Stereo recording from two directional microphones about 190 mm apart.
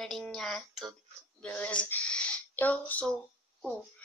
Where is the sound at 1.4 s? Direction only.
5° left (ahead or behind).